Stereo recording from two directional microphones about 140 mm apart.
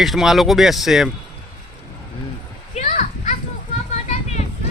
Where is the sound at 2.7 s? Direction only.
55° left (ahead or behind).